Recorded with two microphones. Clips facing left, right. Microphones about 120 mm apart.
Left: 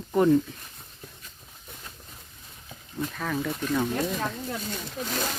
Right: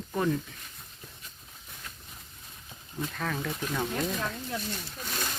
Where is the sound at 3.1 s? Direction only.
5° left (ahead or behind).